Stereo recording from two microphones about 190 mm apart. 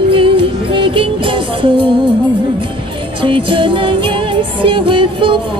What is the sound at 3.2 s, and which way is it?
Music, 30° right (ahead or behind).